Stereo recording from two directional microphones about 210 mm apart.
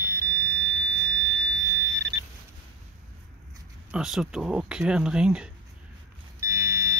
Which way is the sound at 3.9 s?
5° right (ahead or behind).